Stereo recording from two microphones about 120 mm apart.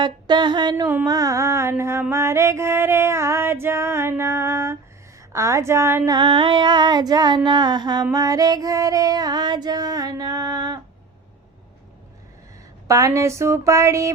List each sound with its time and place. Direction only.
0.0 s female singing: 40° right (ahead or behind)
1.0 s music: 30° right (ahead or behind)
6.1 s female singing: 40° right (ahead or behind)
12.9 s music: 25° right (ahead or behind)